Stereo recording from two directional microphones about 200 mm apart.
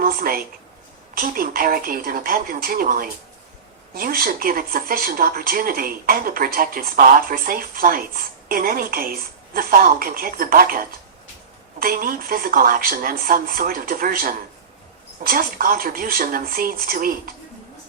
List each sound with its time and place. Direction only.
0.0 s a woman's voice: 45° right (ahead or behind)